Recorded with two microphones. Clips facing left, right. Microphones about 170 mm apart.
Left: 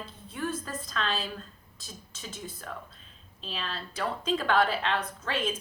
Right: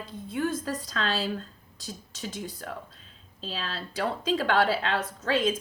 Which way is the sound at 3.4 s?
35° right (ahead or behind).